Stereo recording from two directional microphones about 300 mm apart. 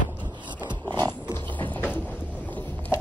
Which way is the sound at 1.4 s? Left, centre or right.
Centre.